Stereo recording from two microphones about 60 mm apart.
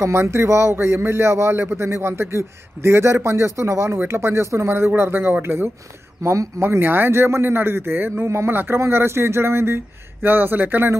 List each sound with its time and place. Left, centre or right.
0.0 s a man's voice: right
6.2 s a man's voice: right